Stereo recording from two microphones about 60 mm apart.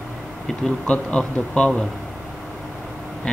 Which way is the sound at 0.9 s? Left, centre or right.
Centre.